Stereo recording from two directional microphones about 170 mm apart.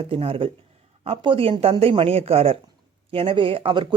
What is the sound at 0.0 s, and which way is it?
A man's voice, 35° right (ahead or behind).